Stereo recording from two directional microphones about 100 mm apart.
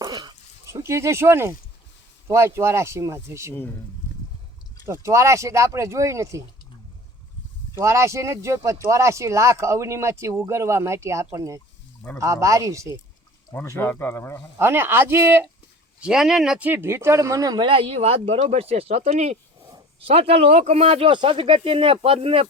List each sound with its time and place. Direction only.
0.0 s a sound: 45° right (ahead or behind)
0.6 s speech: 30° right (ahead or behind)
3.5 s speech: 20° left (ahead or behind)
4.9 s speech: 30° right (ahead or behind)
7.8 s speech: 30° right (ahead or behind)
13.5 s speech: 20° left (ahead or behind)
14.6 s speech: 20° right (ahead or behind)
16.0 s speech: 5° right (ahead or behind)
16.6 s speech: 25° right (ahead or behind)
17.6 s speech: 65° right (ahead or behind); by 19.3 s 90° right
20.0 s speech: 75° right (ahead or behind)